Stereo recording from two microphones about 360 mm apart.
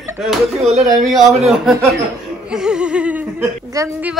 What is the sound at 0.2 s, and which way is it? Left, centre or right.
A man's voice, centre.